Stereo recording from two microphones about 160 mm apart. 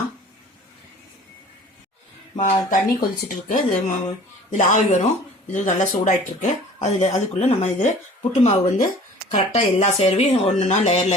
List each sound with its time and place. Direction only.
2.3 s speech: 45° left (ahead or behind)
2.6 s speech: 60° left (ahead or behind)
4.5 s speech: 45° left (ahead or behind)